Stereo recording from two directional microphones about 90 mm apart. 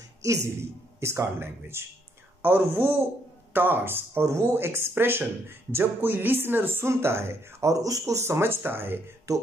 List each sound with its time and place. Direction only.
0.2 s speech: 35° right (ahead or behind)
9.3 s speech: 35° right (ahead or behind)